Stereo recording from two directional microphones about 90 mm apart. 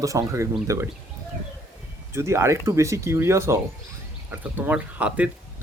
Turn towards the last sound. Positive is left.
turn(degrees=-15)  # may be behind; listen again after turning